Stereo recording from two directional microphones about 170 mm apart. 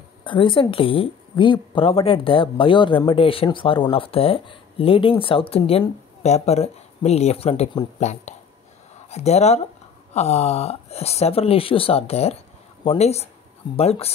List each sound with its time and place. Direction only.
0.2 s speech: 30° left (ahead or behind)